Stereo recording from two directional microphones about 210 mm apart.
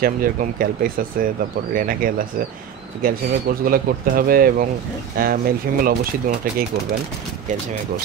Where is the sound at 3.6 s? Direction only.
45° right (ahead or behind).